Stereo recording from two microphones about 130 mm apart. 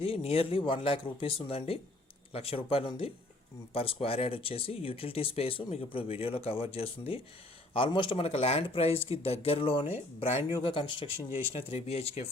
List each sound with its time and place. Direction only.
0.0 s speech: 50° left (ahead or behind)
10.5 s speech: 40° left (ahead or behind)